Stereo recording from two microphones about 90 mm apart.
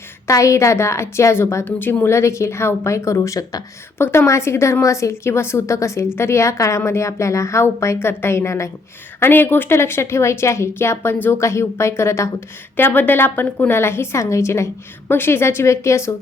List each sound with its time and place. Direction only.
0.3 s a woman's voice: 35° left (ahead or behind)
12.7 s a woman's voice: 20° left (ahead or behind)